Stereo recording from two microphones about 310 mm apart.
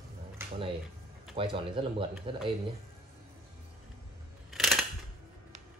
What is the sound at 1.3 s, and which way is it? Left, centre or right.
Speech, centre.